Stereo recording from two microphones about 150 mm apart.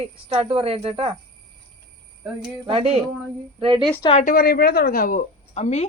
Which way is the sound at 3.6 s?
35° right (ahead or behind).